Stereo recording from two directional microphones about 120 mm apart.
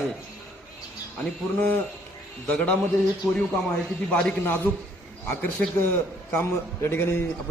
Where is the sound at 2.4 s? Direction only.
5° left (ahead or behind).